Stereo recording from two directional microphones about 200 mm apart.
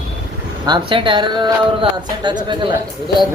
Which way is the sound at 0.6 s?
25° right (ahead or behind).